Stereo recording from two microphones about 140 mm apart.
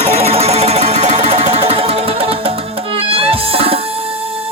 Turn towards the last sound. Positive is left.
turn(degrees=-45)  # may be behind; listen again after turning